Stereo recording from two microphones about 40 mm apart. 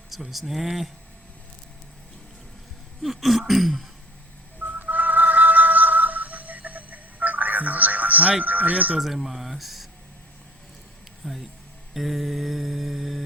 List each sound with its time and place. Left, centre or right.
0.1 s speech: centre
3.0 s speech: centre
4.6 s a sound: right
8.4 s speech: right
9.0 s speech: centre
11.2 s speech: centre
11.9 s mantra: centre